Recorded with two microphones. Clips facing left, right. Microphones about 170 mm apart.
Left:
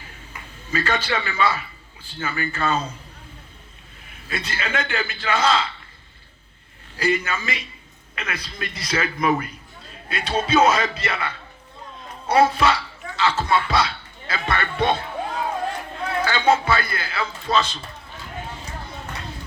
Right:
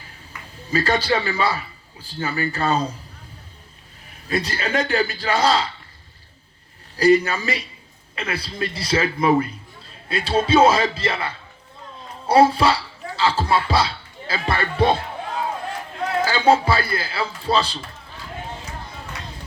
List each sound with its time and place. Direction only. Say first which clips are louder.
0.7 s a man's voice: right 4 dB; 35° right (ahead or behind)
4.1 s a man's voice: right 6 dB; 35° right (ahead or behind)
6.9 s a man's voice: right 7 dB; 35° right (ahead or behind)
16.2 s a man's voice: right 2 dB; 30° right (ahead or behind)